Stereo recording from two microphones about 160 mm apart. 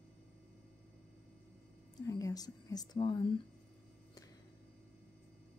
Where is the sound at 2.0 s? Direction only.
20° left (ahead or behind).